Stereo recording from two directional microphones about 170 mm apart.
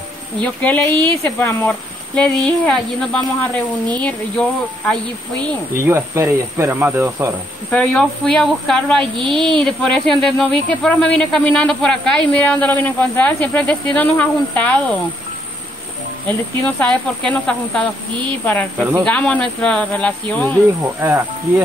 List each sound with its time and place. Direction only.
0.4 s speech: 10° left (ahead or behind)
5.8 s speech: 15° right (ahead or behind)
7.7 s speech: 5° left (ahead or behind)
16.3 s speech: 5° left (ahead or behind)
21.0 s speech: 15° right (ahead or behind)